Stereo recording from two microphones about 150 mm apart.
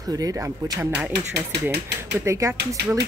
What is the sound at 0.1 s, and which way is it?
Speech, 25° right (ahead or behind).